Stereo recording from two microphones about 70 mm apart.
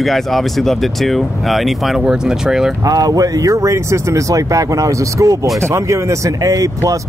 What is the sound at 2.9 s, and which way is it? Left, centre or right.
Speech, right.